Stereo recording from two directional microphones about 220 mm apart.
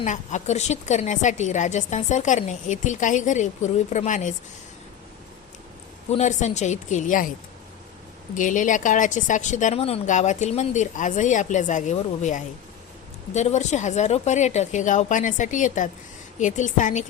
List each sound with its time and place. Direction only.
0.0 s a woman's voice: 35° left (ahead or behind)
6.1 s a woman's voice: 30° left (ahead or behind)
8.4 s a woman's voice: 35° left (ahead or behind)